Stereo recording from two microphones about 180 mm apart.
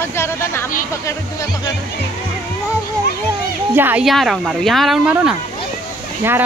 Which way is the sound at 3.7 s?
10° right (ahead or behind).